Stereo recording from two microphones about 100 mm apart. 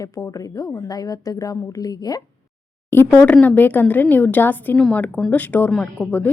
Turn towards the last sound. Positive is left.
turn(degrees=15)  # may be behind; listen again after turning